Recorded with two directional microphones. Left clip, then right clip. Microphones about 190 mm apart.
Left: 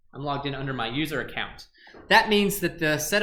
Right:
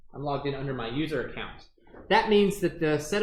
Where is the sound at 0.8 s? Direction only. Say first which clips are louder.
Left 5 dB; 35° left (ahead or behind).